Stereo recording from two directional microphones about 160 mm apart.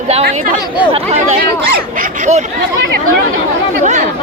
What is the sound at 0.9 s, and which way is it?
Chatter, 45° right (ahead or behind).